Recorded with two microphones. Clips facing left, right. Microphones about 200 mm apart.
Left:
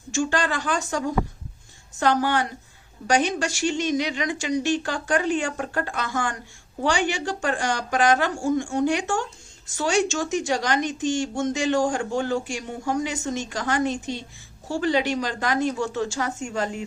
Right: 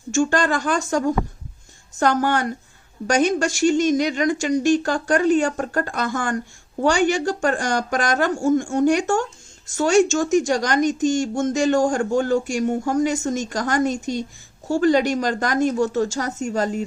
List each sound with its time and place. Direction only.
0.1 s speech: 45° right (ahead or behind)